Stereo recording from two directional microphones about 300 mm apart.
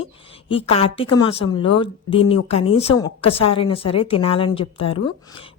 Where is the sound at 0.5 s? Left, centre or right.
Centre.